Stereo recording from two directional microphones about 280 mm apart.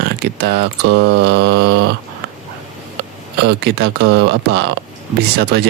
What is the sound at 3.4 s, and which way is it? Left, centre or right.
Speech, right.